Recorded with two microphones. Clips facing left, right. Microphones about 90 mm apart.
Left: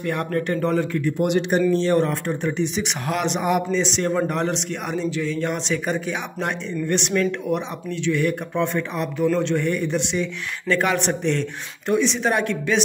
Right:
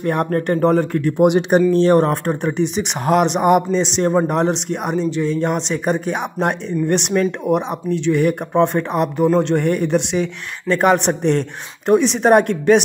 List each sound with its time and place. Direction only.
0.0 s speech: 40° right (ahead or behind)
5.2 s speech: 35° right (ahead or behind)
5.5 s a man's voice: 45° right (ahead or behind)
10.7 s speech: 45° right (ahead or behind)